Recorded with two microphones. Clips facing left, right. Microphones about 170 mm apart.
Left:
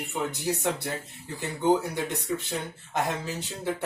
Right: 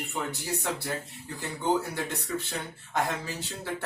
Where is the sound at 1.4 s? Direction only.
20° left (ahead or behind).